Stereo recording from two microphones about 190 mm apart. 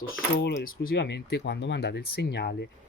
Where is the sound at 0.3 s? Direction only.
60° left (ahead or behind).